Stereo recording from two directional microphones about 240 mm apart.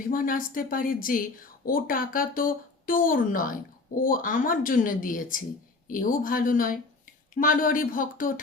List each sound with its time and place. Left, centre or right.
0.1 s a woman's voice: left